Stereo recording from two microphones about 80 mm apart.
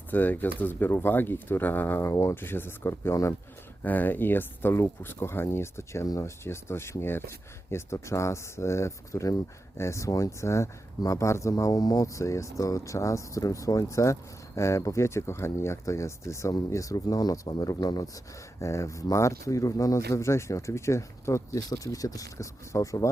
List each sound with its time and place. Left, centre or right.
0.1 s speech: left
2.0 s speech: left
18.6 s speech: left